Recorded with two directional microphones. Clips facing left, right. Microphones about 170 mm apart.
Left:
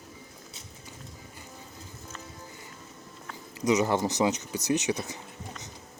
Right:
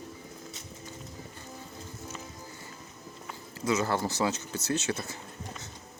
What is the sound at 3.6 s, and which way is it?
Speech, 20° left (ahead or behind).